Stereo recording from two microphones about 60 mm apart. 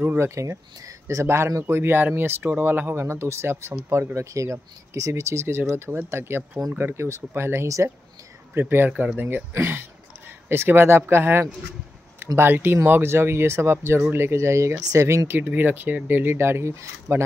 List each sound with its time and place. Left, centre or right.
0.2 s speech: right
1.0 s speech: right
7.6 s speech: right
8.5 s speech: right
15.3 s speech: right